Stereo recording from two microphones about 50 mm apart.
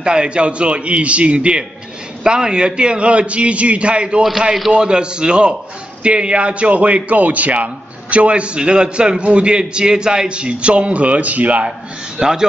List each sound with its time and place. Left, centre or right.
0.0 s a man's voice: centre
4.2 s a man's voice: centre; by 11.7 s right
12.2 s a man's voice: centre